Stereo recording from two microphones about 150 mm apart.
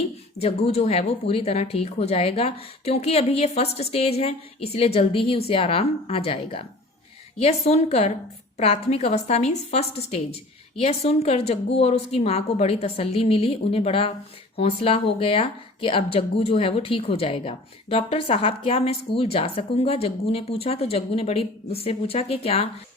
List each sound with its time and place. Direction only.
0.3 s a woman's voice: 45° left (ahead or behind)